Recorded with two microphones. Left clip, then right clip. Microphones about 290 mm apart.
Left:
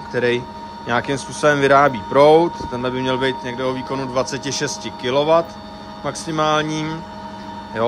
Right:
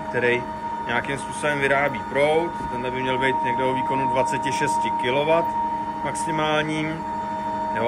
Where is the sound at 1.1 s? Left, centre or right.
Centre.